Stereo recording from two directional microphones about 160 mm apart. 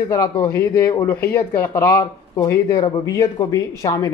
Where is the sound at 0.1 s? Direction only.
20° left (ahead or behind).